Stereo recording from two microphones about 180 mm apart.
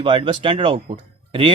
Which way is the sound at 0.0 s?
30° right (ahead or behind).